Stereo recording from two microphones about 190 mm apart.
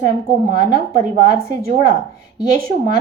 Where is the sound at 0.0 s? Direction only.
45° right (ahead or behind).